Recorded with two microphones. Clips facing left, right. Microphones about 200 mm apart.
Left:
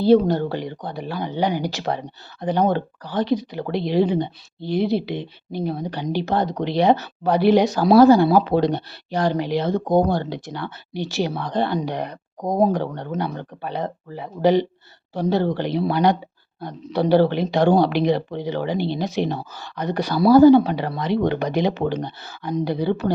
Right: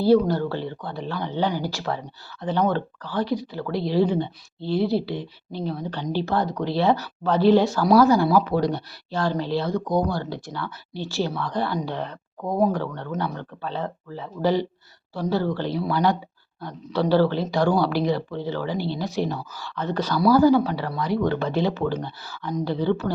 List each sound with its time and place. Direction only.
0.0 s speech: 20° left (ahead or behind)
12.4 s speech: 35° left (ahead or behind)
12.7 s speech: 20° left (ahead or behind)